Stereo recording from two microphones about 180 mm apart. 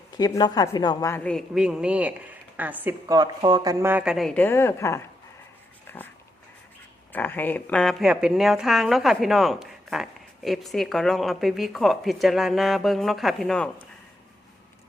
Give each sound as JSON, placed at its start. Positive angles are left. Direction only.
{"t": 0.2, "sound": "a woman's voice", "side_deg": 20}
{"t": 1.1, "sound": "a woman's voice", "side_deg": 5}
{"t": 2.8, "sound": "a woman's voice", "side_deg": -20}
{"t": 5.9, "sound": "dog", "side_deg": 10}
{"t": 7.1, "sound": "a woman's voice", "side_deg": 10}